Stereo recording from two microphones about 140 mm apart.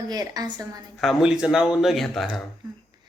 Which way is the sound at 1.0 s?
5° right (ahead or behind).